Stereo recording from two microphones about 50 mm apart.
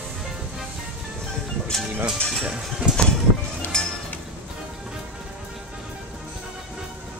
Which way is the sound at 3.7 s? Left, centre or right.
Centre.